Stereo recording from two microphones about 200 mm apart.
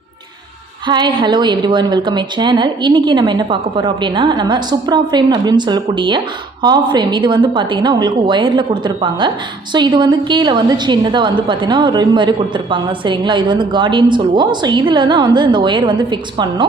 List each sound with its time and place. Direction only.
0.9 s a woman's voice: 20° right (ahead or behind)